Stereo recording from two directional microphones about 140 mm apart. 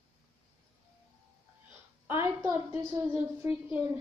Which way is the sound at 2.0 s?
15° right (ahead or behind).